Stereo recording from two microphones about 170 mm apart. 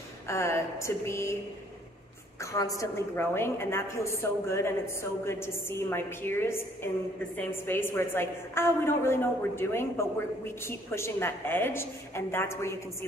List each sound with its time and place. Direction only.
0.3 s a woman's voice: 15° left (ahead or behind)
2.4 s a woman's voice: 20° left (ahead or behind)